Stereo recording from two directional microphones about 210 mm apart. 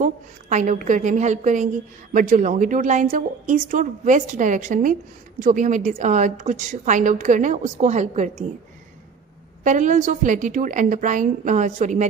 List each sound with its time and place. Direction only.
0.0 s a woman's voice: 35° right (ahead or behind)
9.6 s a woman's voice: 35° right (ahead or behind)